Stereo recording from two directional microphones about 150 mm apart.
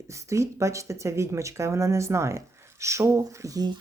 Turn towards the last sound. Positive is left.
turn(degrees=-25)  # may be behind; listen again after turning